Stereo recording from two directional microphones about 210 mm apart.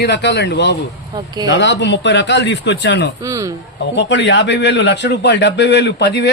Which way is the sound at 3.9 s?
55° left (ahead or behind).